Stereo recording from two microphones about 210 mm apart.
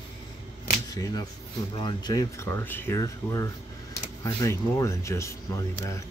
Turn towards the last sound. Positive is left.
turn(degrees=15)  # may be behind; listen again after turning